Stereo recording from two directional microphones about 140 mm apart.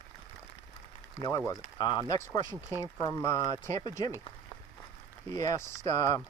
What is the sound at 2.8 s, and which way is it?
Speech, 20° left (ahead or behind).